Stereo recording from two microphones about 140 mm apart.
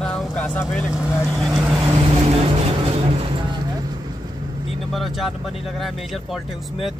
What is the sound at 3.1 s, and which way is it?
Vehicle, 40° right (ahead or behind).